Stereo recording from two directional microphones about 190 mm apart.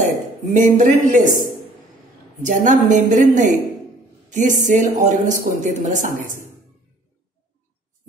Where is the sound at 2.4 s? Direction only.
40° right (ahead or behind).